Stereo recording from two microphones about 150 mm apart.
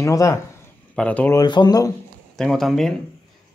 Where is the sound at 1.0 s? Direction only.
10° left (ahead or behind).